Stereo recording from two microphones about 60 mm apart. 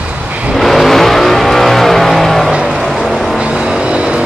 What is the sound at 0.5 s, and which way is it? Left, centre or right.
Vehicle, centre.